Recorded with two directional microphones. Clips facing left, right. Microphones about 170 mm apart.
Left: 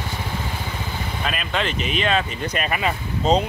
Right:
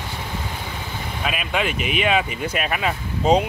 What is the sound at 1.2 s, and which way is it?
Speech, 10° right (ahead or behind).